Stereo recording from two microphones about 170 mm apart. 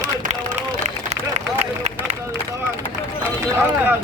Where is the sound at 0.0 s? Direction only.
45° right (ahead or behind).